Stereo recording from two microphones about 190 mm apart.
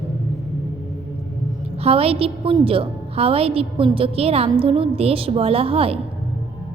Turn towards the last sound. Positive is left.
turn(degrees=-30)  # may be behind; listen again after turning